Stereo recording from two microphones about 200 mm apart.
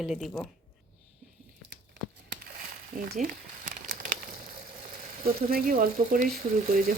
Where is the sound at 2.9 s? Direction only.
45° right (ahead or behind).